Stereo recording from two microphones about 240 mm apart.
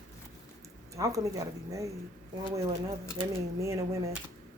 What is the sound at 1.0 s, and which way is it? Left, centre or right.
Speech, centre.